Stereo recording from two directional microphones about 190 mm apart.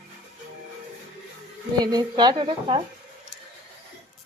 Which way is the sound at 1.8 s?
20° right (ahead or behind).